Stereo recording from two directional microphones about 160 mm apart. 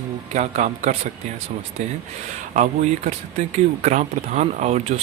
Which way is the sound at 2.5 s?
50° right (ahead or behind).